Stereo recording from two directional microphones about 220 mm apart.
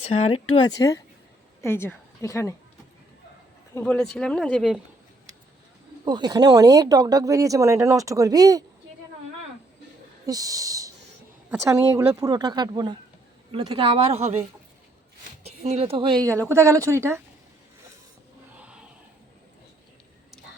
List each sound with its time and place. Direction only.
0.1 s a woman's voice: 25° left (ahead or behind)
3.8 s speech: 5° left (ahead or behind)
6.1 s speech: 20° right (ahead or behind)
10.2 s speech: 15° right (ahead or behind)
15.4 s speech: 30° right (ahead or behind); by 17.2 s 10° right (ahead or behind)
18.5 s a sound: 5° right (ahead or behind)